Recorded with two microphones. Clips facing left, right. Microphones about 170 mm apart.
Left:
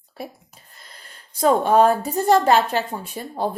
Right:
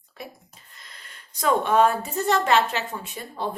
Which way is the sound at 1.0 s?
35° left (ahead or behind).